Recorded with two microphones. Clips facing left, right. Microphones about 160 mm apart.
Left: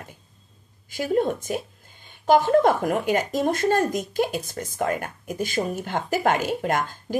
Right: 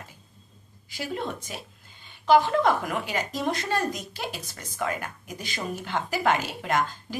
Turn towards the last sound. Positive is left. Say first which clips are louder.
# left 2 dB
turn(degrees=50)  # may be behind; listen again after turning